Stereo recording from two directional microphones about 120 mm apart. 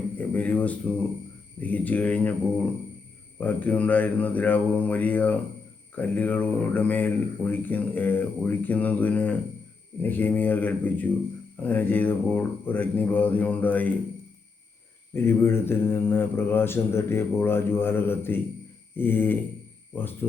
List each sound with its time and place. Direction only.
0.2 s speech: 10° left (ahead or behind)
3.4 s speech: 15° left (ahead or behind)
15.1 s speech: 20° left (ahead or behind)